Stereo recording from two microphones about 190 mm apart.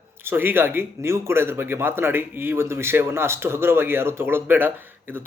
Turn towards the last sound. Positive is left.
turn(degrees=-10)  # may be behind; listen again after turning